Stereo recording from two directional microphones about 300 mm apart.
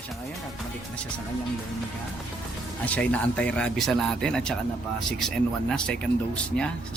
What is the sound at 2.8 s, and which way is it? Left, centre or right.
Speech, centre.